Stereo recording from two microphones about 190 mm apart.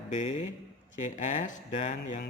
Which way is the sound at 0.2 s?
30° left (ahead or behind).